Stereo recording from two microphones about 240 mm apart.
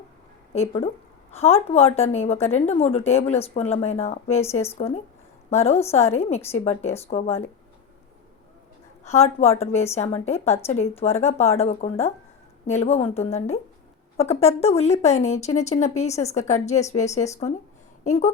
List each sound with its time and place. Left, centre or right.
1.3 s speech: left
9.0 s speech: left